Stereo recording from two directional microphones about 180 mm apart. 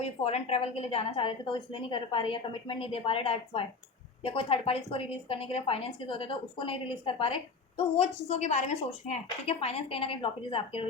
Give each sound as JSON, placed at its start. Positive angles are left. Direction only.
{"t": 0.0, "sound": "a woman's voice", "side_deg": 35}